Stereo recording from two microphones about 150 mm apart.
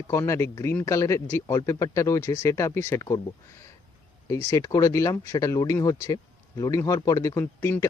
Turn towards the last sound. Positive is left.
turn(degrees=20)  # may be behind; listen again after turning